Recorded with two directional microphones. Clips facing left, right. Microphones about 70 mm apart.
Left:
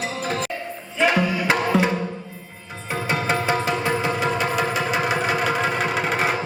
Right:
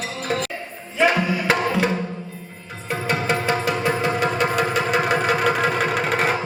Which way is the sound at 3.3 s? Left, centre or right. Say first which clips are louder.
Even; left.